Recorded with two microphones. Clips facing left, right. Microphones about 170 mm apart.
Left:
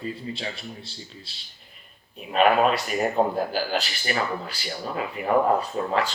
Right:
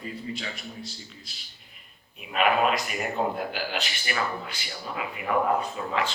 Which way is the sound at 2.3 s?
35° left (ahead or behind).